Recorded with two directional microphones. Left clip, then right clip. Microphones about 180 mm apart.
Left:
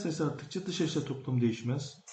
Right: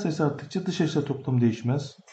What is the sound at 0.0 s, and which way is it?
Speech, 55° right (ahead or behind).